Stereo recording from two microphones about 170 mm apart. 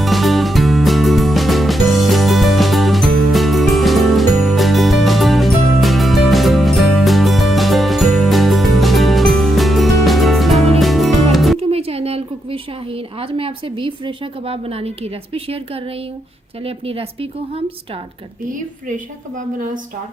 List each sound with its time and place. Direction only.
0.0 s music: centre (ahead or behind)
11.7 s a sound: 35° right (ahead or behind)
16.6 s a woman's voice: 35° right (ahead or behind)